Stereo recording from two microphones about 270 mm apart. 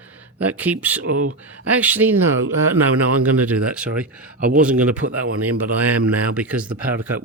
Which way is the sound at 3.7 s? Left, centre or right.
Centre.